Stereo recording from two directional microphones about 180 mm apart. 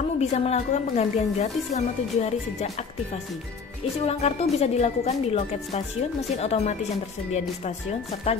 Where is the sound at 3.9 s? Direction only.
35° left (ahead or behind).